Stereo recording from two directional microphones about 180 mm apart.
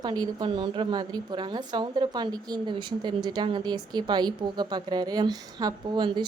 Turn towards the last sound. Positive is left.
turn(degrees=-25)  # may be behind; listen again after turning